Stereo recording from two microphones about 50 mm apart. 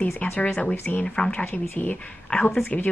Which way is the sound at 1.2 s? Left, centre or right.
Left.